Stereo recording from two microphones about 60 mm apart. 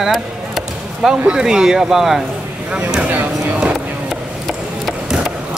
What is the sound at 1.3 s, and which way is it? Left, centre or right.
Speech, centre.